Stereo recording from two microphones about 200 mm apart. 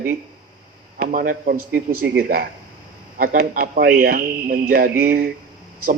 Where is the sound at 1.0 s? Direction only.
45° right (ahead or behind).